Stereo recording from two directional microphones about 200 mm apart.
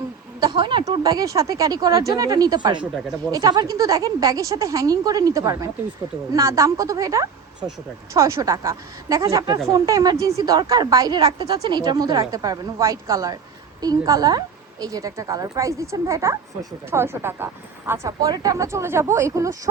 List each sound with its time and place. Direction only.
0.6 s a woman's voice: 25° right (ahead or behind)